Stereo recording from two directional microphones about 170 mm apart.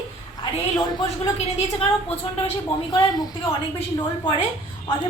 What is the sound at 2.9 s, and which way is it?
Speech, 25° left (ahead or behind).